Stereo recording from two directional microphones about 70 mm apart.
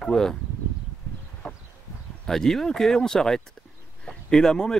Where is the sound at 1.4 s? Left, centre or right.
Centre.